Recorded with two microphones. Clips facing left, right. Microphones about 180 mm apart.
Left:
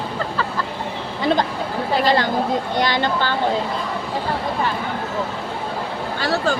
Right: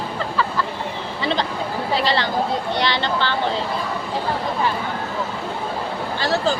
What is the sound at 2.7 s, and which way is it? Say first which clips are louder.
Speech: left 2 dB; 45° left (ahead or behind).